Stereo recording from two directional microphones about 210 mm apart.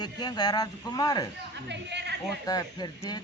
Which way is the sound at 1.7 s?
55° right (ahead or behind).